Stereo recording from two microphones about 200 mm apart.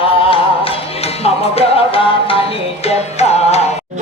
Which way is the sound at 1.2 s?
30° left (ahead or behind).